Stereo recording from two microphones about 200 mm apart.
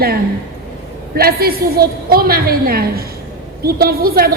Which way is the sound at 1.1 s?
50° right (ahead or behind).